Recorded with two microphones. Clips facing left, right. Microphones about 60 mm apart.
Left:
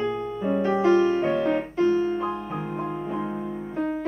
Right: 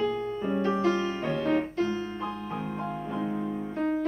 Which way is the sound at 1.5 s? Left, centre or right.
Centre.